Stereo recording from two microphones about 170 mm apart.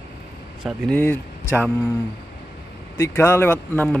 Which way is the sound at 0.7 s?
10° left (ahead or behind).